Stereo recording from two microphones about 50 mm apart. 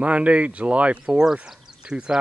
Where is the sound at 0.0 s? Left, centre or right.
Right.